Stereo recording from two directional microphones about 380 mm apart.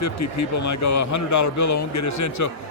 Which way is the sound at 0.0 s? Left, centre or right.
Left.